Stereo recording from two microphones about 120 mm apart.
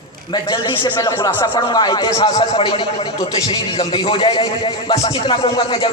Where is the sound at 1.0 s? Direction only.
40° left (ahead or behind).